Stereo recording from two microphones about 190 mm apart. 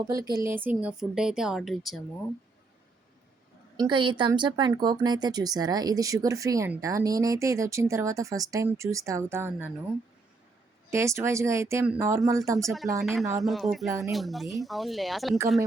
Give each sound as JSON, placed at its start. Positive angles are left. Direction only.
{"t": 0.0, "sound": "a woman's voice", "side_deg": -20}
{"t": 3.8, "sound": "speech", "side_deg": -25}
{"t": 10.9, "sound": "speech", "side_deg": -15}
{"t": 13.0, "sound": "a woman's voice", "side_deg": 0}